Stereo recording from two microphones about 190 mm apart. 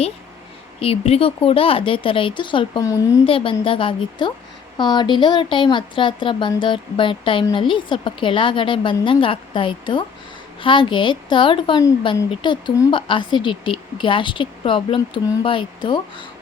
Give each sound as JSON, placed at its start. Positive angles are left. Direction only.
{"t": 0.8, "sound": "a woman's voice", "side_deg": 30}
{"t": 3.2, "sound": "a woman's voice", "side_deg": 30}